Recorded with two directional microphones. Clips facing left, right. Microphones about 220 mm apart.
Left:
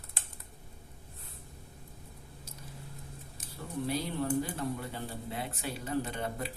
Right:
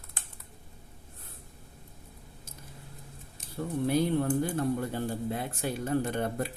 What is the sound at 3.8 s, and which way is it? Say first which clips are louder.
Speech: right 6 dB; 50° right (ahead or behind).